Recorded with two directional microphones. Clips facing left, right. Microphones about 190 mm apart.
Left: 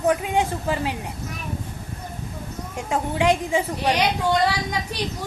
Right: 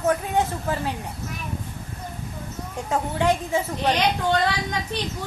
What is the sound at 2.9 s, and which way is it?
A woman's voice, 15° left (ahead or behind).